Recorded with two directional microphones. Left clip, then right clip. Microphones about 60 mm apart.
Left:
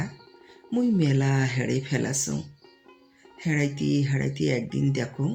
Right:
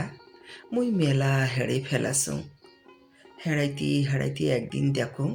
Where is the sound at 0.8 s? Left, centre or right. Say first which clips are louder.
Even; right.